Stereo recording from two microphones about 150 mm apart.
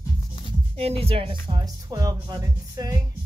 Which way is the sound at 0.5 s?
40° right (ahead or behind).